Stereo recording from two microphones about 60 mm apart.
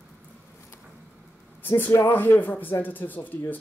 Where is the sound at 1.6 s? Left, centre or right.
Left.